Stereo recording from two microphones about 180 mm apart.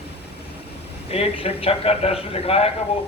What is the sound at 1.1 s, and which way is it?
A man's voice, 35° left (ahead or behind).